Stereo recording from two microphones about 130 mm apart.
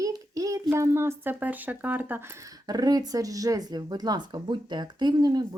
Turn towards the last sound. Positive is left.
turn(degrees=-30)  # may be behind; listen again after turning